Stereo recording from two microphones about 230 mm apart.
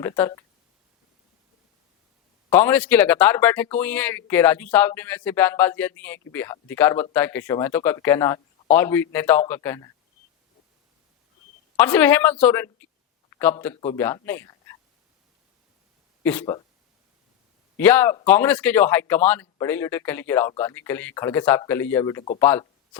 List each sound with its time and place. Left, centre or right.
0.0 s speech: centre
2.5 s speech: centre
11.8 s a man's voice: centre
16.2 s speech: centre
17.7 s speech: centre